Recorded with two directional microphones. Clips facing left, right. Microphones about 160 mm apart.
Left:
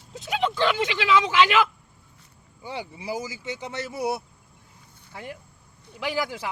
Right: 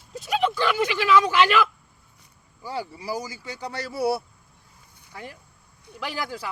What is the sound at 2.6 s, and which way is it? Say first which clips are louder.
Speech: right 3 dB; 20° left (ahead or behind).